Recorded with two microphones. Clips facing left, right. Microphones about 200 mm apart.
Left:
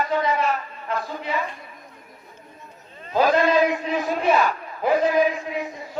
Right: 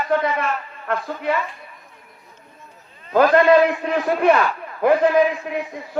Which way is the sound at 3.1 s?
55° right (ahead or behind).